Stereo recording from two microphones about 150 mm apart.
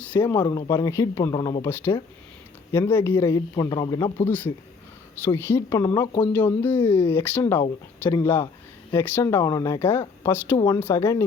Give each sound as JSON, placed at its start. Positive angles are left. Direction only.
{"t": 0.0, "sound": "speech", "side_deg": 10}